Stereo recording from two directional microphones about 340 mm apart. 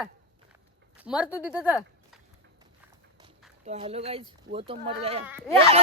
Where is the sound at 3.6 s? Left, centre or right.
Centre.